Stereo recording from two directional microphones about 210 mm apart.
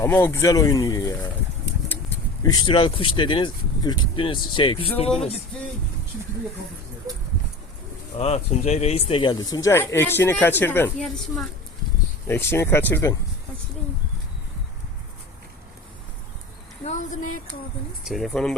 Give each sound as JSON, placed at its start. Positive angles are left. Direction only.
{"t": 0.0, "sound": "speech", "side_deg": 10}
{"t": 8.2, "sound": "speech", "side_deg": 30}
{"t": 12.3, "sound": "speech", "side_deg": 10}
{"t": 16.8, "sound": "a sound", "side_deg": 35}
{"t": 18.0, "sound": "speech", "side_deg": 0}